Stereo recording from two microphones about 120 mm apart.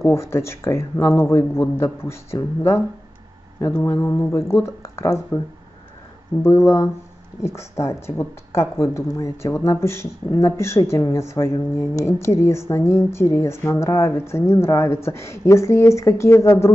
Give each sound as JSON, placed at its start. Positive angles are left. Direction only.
{"t": 0.0, "sound": "speech", "side_deg": 20}
{"t": 6.4, "sound": "speech", "side_deg": 20}